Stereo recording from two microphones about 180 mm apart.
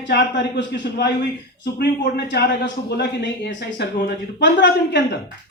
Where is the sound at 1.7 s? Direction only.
65° left (ahead or behind).